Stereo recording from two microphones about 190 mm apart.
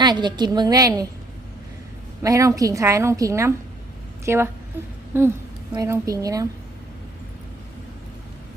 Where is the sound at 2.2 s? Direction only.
15° right (ahead or behind).